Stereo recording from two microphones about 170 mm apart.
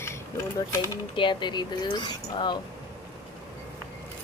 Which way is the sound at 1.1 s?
30° left (ahead or behind).